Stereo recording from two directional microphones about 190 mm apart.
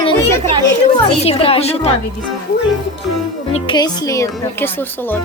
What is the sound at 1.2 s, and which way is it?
Speech, 30° left (ahead or behind).